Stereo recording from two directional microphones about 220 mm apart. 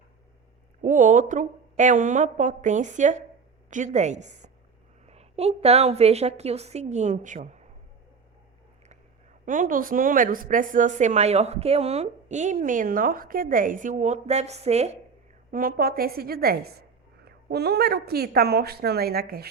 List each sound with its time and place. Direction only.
0.8 s a woman's voice: 35° right (ahead or behind)
9.5 s a woman's voice: 40° right (ahead or behind)
15.5 s a woman's voice: 40° right (ahead or behind)